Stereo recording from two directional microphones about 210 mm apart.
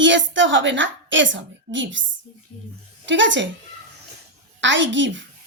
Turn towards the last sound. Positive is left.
turn(degrees=-60)  # may be behind; listen again after turning